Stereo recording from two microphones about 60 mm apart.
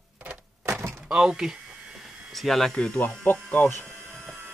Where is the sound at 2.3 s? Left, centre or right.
Centre.